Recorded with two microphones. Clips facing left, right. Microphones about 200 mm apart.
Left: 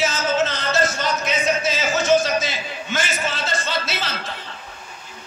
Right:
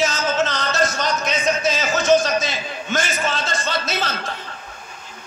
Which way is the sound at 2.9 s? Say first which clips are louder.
Right 3 dB; 45° right (ahead or behind).